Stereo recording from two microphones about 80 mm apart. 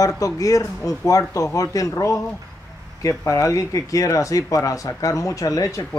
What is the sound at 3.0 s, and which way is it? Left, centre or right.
Speech, left.